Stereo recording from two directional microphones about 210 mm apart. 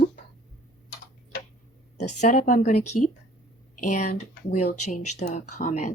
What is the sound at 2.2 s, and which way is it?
Speech, 35° left (ahead or behind).